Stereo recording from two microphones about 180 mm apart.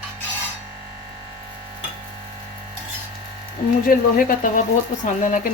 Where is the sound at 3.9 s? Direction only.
50° left (ahead or behind).